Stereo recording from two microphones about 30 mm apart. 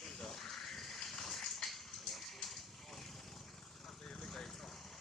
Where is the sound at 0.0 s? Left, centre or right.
Centre.